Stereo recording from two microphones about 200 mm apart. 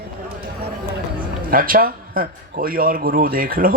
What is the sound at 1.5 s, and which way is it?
A man's voice, 45° right (ahead or behind).